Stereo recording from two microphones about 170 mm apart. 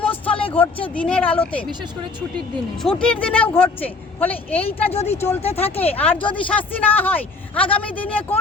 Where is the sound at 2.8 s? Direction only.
5° left (ahead or behind).